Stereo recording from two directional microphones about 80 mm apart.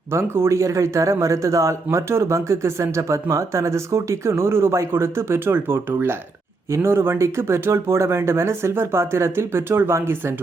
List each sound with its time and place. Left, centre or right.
0.1 s a man's voice: right